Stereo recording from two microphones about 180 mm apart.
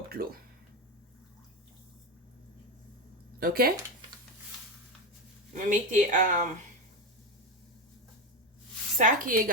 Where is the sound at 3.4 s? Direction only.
55° right (ahead or behind).